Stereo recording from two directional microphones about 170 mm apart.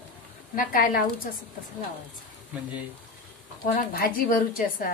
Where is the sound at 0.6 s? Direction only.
55° left (ahead or behind).